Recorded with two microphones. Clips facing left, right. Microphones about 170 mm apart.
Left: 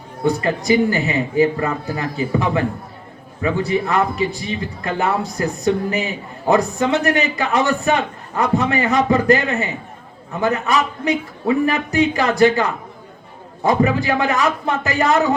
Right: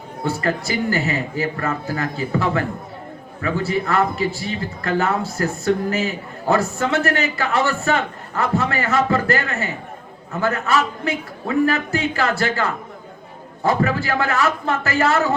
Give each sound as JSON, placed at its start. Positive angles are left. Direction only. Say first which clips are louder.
{"t": 0.3, "sound": "a man's voice", "louder": "left 5 dB", "side_deg": 15}